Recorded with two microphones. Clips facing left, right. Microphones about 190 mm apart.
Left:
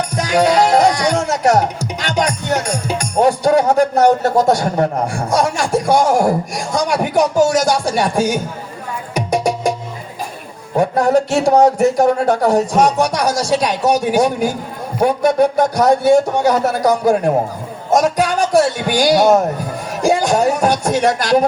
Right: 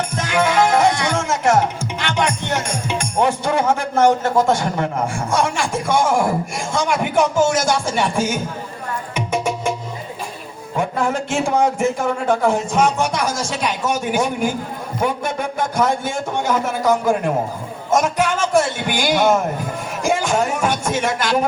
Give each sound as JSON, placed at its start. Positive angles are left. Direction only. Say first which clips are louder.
{"t": 0.1, "sound": "speech", "louder": "left 7 dB", "side_deg": 40}
{"t": 9.1, "sound": "music", "louder": "left 5 dB", "side_deg": 40}
{"t": 10.8, "sound": "a man's voice", "louder": "left 7 dB", "side_deg": 40}